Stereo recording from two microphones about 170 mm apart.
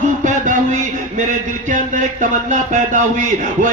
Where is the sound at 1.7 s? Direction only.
45° right (ahead or behind).